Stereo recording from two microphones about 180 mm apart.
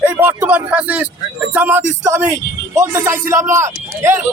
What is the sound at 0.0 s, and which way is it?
Speech, 10° right (ahead or behind).